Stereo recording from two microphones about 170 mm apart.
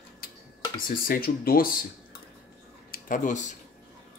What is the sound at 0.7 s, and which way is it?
Speech, 55° left (ahead or behind).